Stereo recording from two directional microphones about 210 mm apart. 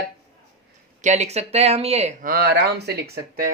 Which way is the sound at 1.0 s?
30° right (ahead or behind).